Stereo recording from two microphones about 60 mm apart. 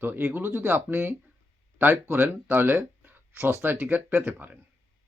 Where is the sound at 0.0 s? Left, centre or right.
Right.